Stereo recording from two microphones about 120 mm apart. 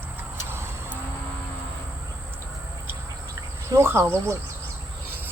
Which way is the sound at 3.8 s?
25° right (ahead or behind).